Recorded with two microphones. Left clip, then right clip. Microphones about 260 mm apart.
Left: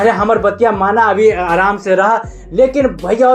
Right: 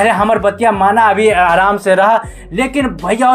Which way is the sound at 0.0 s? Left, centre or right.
Right.